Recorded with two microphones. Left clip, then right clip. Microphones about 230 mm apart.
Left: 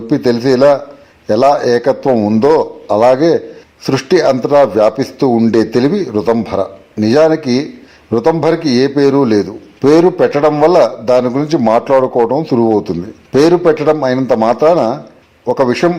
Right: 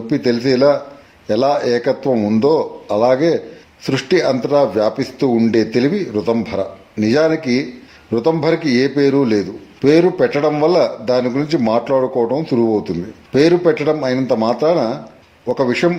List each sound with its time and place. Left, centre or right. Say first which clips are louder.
0.1 s a man's voice: left 4 dB; centre